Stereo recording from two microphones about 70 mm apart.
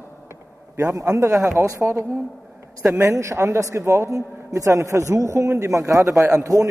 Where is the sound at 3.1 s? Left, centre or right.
Right.